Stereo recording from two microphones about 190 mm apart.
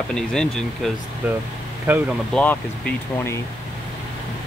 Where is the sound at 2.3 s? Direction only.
5° left (ahead or behind).